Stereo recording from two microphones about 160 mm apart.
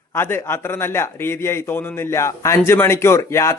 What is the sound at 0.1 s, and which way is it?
A man's voice, 15° left (ahead or behind).